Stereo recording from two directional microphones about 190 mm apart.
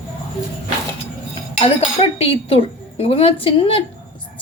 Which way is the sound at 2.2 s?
30° left (ahead or behind).